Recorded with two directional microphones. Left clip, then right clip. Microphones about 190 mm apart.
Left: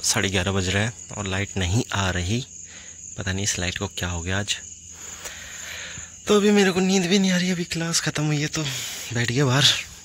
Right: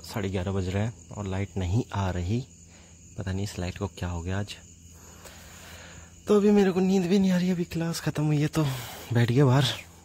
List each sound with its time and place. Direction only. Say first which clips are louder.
0.1 s speech: left 7 dB; 5° left (ahead or behind)
5.7 s speech: left 12 dB; centre (ahead or behind)
8.5 s speech: left 3 dB; 25° right (ahead or behind); by 9.8 s 10° right (ahead or behind)